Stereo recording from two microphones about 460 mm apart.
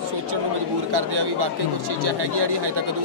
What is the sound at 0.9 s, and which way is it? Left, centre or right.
Speech, right.